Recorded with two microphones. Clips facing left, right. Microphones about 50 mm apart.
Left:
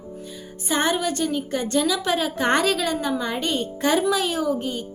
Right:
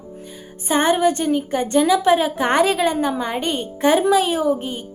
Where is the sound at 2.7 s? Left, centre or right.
Right.